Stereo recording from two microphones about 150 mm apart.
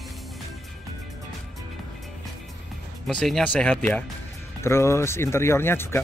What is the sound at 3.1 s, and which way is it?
Speech, 5° left (ahead or behind).